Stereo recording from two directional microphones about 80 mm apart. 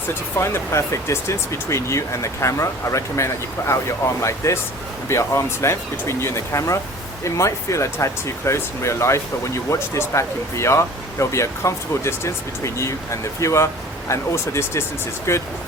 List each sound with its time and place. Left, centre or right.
0.3 s speech: left